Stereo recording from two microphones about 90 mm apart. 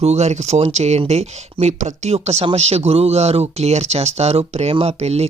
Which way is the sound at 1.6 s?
75° right (ahead or behind).